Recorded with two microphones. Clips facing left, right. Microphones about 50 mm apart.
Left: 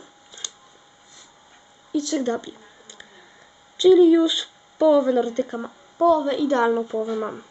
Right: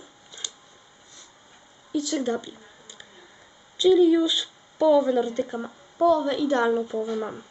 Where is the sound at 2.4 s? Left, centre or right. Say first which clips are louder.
Left 3 dB; centre.